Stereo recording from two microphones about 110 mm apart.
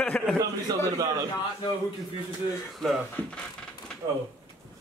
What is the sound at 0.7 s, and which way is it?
Speech, 35° right (ahead or behind).